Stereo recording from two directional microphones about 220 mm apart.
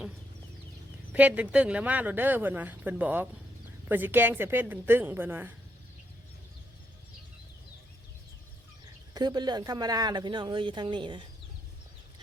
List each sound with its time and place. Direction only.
1.1 s speech: 5° right (ahead or behind)
9.1 s speech: 20° right (ahead or behind)